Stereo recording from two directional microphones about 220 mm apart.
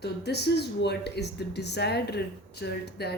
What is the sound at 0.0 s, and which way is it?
Speech, 50° left (ahead or behind).